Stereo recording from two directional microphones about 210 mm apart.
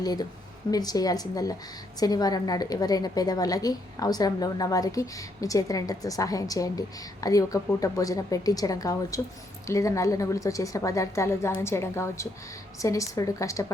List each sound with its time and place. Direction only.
0.0 s a woman's voice: 20° left (ahead or behind)